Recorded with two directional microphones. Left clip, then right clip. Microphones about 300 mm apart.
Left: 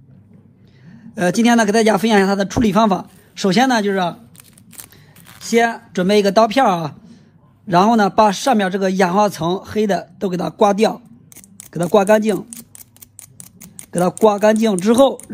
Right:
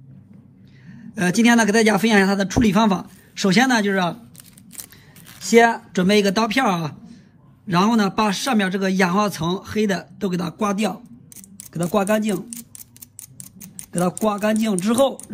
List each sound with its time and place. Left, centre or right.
0.8 s speech: centre
5.4 s a man's voice: centre
12.1 s speech: centre
13.7 s speech: right
14.3 s speech: centre